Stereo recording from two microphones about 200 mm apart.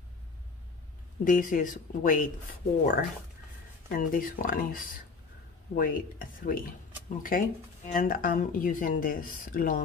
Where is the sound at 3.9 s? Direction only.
45° left (ahead or behind).